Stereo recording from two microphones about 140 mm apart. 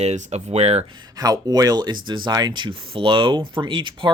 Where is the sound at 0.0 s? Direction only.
50° right (ahead or behind).